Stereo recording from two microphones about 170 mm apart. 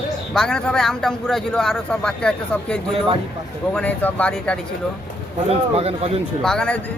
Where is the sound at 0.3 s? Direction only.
5° left (ahead or behind).